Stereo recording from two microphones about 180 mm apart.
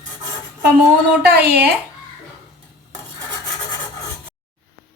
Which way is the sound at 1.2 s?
60° right (ahead or behind).